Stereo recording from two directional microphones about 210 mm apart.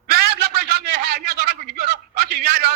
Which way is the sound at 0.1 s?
50° right (ahead or behind).